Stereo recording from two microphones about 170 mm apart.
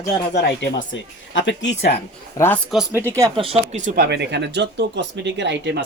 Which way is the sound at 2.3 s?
15° left (ahead or behind).